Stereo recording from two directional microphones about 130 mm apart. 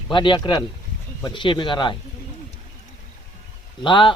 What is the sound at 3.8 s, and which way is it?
Speech, 40° left (ahead or behind).